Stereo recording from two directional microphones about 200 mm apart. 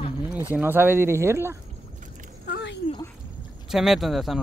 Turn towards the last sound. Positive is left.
turn(degrees=0)  # may be behind; listen again after turning